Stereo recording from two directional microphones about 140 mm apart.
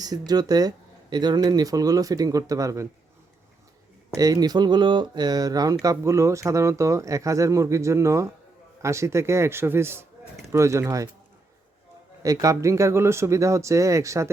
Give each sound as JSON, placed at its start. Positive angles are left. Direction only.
{"t": 0.0, "sound": "speech", "side_deg": -30}
{"t": 4.2, "sound": "speech", "side_deg": -25}
{"t": 12.2, "sound": "speech", "side_deg": -25}